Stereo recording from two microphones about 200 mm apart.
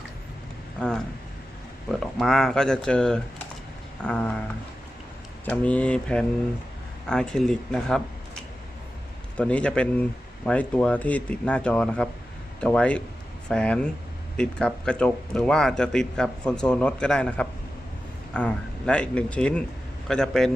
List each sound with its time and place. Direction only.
0.8 s a man's voice: 5° left (ahead or behind)
5.5 s a man's voice: 5° left (ahead or behind)
9.4 s a man's voice: 5° left (ahead or behind)